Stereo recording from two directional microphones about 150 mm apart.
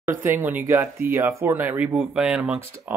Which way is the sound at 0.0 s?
15° right (ahead or behind).